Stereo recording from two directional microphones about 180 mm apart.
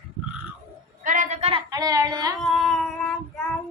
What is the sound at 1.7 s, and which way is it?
Child singing, 20° right (ahead or behind).